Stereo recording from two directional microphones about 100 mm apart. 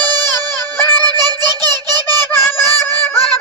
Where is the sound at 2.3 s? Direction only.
25° left (ahead or behind).